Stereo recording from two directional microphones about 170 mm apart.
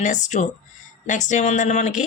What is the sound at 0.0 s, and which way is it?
Speech, 45° left (ahead or behind).